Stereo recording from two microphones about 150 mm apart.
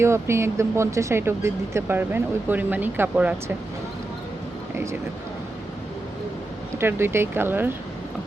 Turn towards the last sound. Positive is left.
turn(degrees=-15)  # may be behind; listen again after turning